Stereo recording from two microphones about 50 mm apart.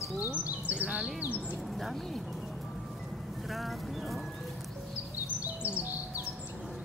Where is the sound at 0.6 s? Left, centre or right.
Centre.